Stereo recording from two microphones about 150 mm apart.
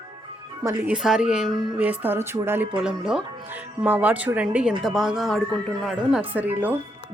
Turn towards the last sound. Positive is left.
turn(degrees=-10)  # may be behind; listen again after turning